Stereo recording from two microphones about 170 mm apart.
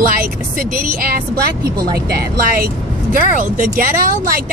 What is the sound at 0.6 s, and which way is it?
Speech, 55° right (ahead or behind).